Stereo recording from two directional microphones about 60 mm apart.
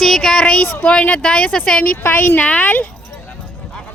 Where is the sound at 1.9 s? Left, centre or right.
Left.